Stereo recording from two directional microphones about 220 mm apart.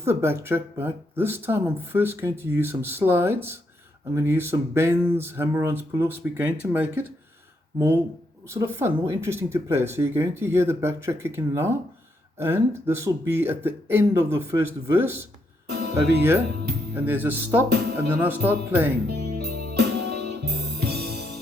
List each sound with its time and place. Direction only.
0.0 s speech: 10° right (ahead or behind)
8.4 s speech: 10° right (ahead or behind)
15.7 s music: 50° right (ahead or behind)
16.9 s speech: 10° right (ahead or behind)
19.0 s music: 45° right (ahead or behind)